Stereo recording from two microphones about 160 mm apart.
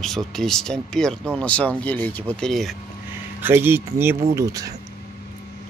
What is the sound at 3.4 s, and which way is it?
Speech, 15° right (ahead or behind).